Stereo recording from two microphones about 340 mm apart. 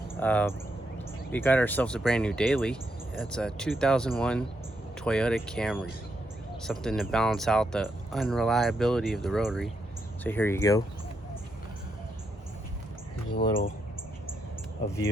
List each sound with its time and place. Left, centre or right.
0.2 s speech: centre